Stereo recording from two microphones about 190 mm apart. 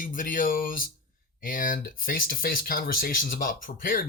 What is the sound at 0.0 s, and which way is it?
Speech, 45° left (ahead or behind).